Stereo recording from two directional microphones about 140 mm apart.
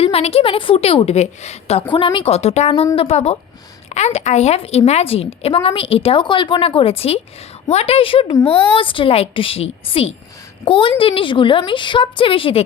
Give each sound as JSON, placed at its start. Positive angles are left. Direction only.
{"t": 0.0, "sound": "a woman's voice", "side_deg": 45}
{"t": 1.9, "sound": "a woman's voice", "side_deg": 35}